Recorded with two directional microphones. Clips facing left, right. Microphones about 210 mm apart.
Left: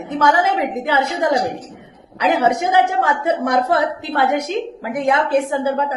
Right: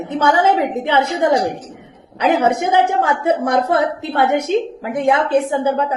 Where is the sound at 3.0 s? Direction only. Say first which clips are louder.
Right 2 dB; 25° right (ahead or behind).